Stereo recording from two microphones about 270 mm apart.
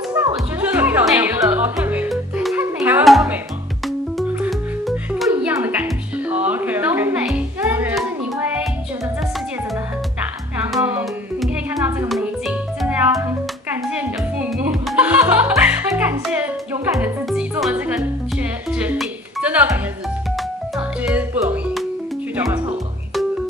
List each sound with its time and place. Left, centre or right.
0.1 s music: centre
10.8 s music: centre
21.0 s music: centre